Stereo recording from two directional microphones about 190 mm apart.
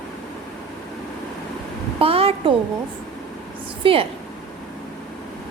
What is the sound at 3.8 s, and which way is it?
Speech, 25° right (ahead or behind).